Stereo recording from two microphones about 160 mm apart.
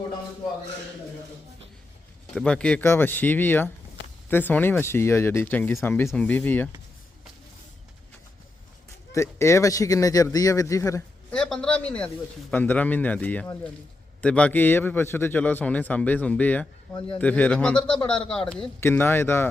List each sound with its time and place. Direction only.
2.3 s a man's voice: 5° left (ahead or behind)
9.1 s a man's voice: 15° left (ahead or behind)
11.3 s a man's voice: 5° left (ahead or behind)